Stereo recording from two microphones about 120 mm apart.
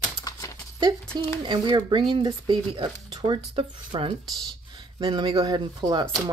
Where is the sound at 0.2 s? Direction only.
30° left (ahead or behind).